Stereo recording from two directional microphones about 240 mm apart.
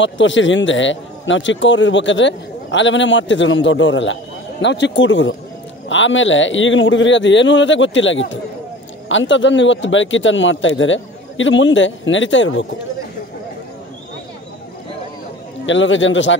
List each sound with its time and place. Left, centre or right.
0.0 s speech: left
15.6 s speech: left